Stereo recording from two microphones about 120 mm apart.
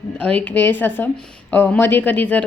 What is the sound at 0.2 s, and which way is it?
Speech, 10° left (ahead or behind).